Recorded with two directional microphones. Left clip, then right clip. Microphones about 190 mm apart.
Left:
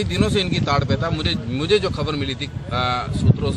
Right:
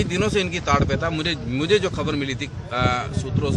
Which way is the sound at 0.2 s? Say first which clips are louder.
Left 2 dB; centre (ahead or behind).